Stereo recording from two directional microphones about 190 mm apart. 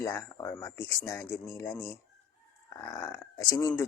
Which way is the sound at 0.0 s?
15° left (ahead or behind).